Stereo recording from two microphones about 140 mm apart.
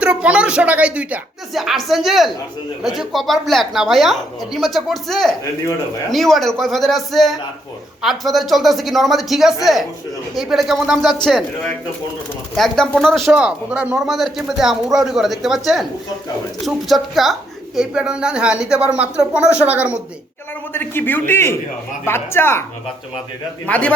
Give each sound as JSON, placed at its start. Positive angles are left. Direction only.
{"t": 0.0, "sound": "a woman's voice", "side_deg": -10}
{"t": 12.5, "sound": "a woman's voice", "side_deg": 5}
{"t": 20.7, "sound": "a man's voice", "side_deg": 15}
{"t": 23.6, "sound": "a man's voice", "side_deg": 10}